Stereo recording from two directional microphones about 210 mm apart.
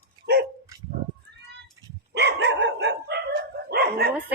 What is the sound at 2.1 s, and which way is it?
Dog, 55° right (ahead or behind).